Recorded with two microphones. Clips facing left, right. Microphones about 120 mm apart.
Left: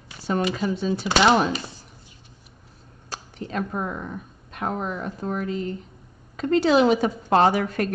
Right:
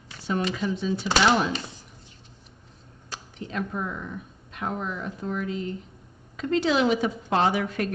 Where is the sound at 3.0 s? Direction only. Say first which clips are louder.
Left 3 dB; 40° left (ahead or behind).